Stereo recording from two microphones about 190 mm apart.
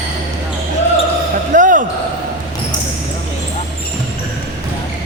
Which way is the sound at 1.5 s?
45° right (ahead or behind).